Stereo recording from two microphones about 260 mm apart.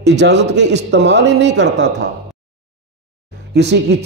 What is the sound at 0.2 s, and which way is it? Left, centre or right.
Speech, right.